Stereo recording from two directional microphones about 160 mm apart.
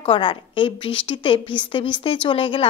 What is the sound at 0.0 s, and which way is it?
A woman's voice, 35° left (ahead or behind).